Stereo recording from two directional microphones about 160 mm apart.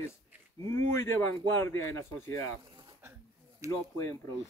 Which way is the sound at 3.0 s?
15° right (ahead or behind).